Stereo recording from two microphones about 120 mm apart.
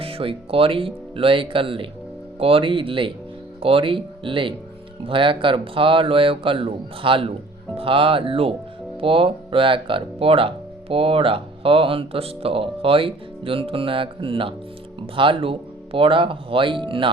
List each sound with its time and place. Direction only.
0.0 s speech: 50° right (ahead or behind)